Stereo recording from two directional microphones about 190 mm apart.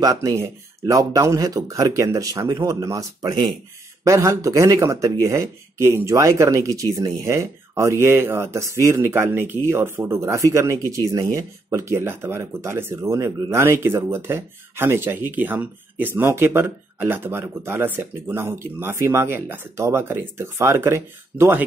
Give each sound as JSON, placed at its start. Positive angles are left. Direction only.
{"t": 0.0, "sound": "speech", "side_deg": -20}